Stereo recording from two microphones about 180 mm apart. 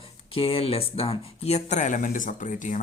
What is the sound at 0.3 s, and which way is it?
Speech, 30° left (ahead or behind).